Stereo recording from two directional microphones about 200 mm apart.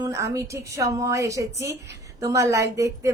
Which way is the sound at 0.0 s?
15° right (ahead or behind).